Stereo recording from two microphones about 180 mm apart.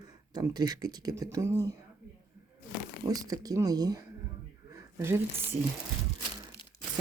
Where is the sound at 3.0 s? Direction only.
20° right (ahead or behind).